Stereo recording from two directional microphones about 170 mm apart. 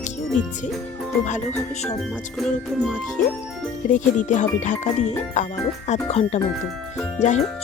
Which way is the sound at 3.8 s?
45° left (ahead or behind).